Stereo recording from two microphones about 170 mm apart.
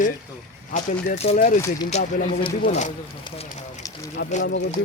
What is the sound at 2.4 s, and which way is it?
Speech, 30° left (ahead or behind).